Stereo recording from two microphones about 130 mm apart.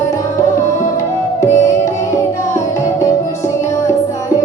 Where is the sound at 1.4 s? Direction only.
25° left (ahead or behind).